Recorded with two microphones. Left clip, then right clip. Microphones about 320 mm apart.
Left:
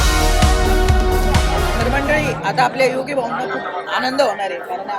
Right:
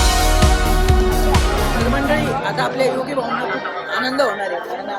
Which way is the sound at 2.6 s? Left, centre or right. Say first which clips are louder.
Left 5 dB; centre.